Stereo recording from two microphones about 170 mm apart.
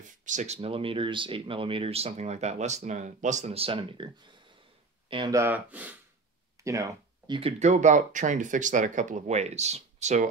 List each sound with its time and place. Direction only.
0.2 s speech: 45° right (ahead or behind); by 4.1 s 30° right (ahead or behind)
5.1 s speech: 25° right (ahead or behind)
5.4 s speech: 10° right (ahead or behind)
6.6 s a sound: 20° right (ahead or behind)
7.3 s speech: 40° right (ahead or behind)